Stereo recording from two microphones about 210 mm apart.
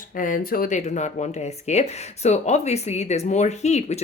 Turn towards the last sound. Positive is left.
turn(degrees=30)  # may be behind; listen again after turning